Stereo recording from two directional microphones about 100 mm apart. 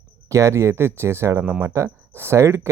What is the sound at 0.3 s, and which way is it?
Speech, 30° right (ahead or behind).